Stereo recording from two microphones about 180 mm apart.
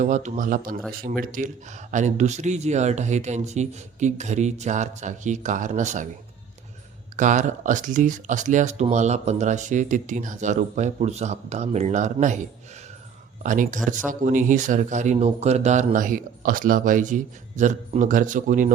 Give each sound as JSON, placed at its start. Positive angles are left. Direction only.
{"t": 0.0, "sound": "speech", "side_deg": -45}
{"t": 7.2, "sound": "speech", "side_deg": -45}
{"t": 13.4, "sound": "speech", "side_deg": -45}